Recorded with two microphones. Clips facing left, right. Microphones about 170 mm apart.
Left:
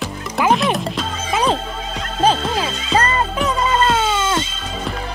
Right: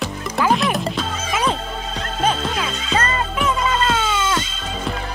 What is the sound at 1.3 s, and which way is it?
Music, 30° left (ahead or behind).